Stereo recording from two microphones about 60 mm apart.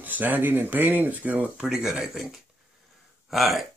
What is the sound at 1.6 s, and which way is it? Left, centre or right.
Speech, centre.